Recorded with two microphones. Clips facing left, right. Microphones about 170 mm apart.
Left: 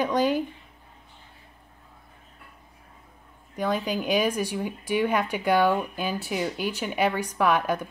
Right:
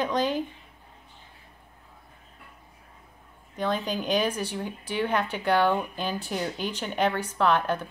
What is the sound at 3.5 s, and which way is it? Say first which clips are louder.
Speech: left 2 dB; 10° left (ahead or behind).